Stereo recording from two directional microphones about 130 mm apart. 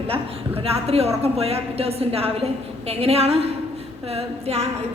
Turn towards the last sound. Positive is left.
turn(degrees=-50)  # may be behind; listen again after turning